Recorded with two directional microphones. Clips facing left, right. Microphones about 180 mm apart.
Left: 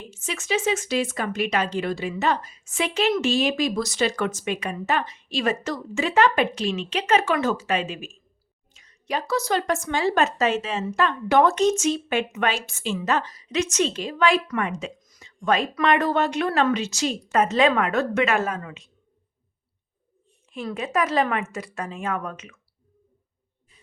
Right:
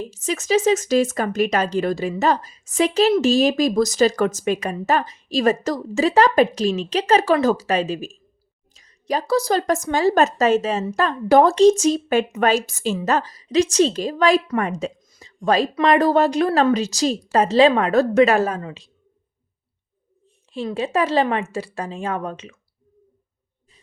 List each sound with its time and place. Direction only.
0.0 s speech: 40° right (ahead or behind)
20.5 s speech: 30° right (ahead or behind)